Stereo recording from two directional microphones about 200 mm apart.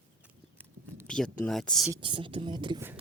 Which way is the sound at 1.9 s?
25° right (ahead or behind).